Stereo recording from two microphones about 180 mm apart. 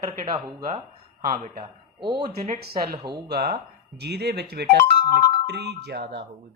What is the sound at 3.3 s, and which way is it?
Speech, 60° right (ahead or behind).